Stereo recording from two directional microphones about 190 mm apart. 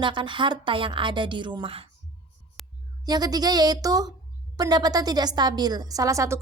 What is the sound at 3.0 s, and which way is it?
A woman's voice, 20° right (ahead or behind).